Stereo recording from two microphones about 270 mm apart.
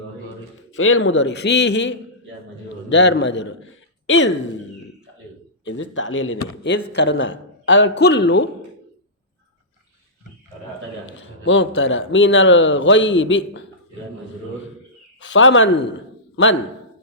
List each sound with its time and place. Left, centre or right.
0.8 s a man's voice: left
5.6 s speech: left
11.4 s speech: left
15.2 s a man's voice: left